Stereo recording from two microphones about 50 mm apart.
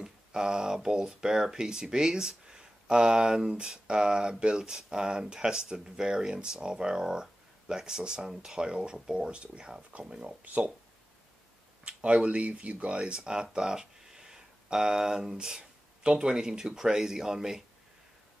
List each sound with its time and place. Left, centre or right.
0.0 s a sound: centre
0.7 s speech: centre; by 10.7 s right
11.8 s speech: right